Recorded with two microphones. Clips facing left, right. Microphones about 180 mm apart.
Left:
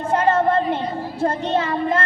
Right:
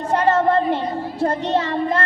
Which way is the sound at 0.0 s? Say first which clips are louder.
Right 1 dB; 35° right (ahead or behind).